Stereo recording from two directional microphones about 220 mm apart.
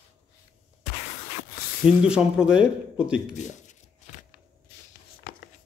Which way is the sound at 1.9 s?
5° right (ahead or behind).